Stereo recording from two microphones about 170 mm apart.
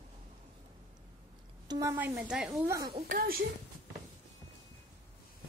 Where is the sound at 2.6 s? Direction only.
20° right (ahead or behind).